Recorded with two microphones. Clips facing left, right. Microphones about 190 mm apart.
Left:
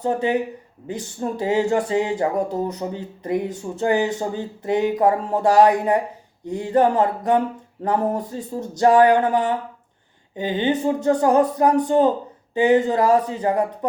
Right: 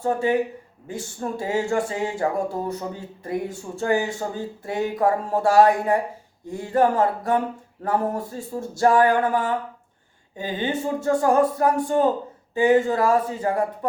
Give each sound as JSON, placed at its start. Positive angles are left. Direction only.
{"t": 0.0, "sound": "speech", "side_deg": 20}